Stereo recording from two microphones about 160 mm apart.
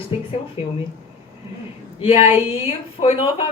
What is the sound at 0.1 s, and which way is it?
Speech, 35° left (ahead or behind).